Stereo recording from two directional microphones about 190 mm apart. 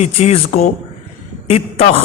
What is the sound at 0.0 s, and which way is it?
A woman's voice, 35° left (ahead or behind).